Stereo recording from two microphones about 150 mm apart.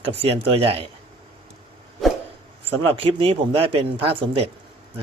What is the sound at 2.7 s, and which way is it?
A man's voice, 40° right (ahead or behind).